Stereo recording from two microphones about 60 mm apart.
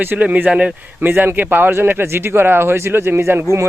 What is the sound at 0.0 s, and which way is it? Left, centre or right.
A man's voice, right.